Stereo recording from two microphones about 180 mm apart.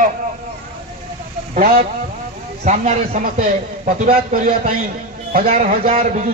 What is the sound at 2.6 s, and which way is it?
A man's voice, 45° right (ahead or behind).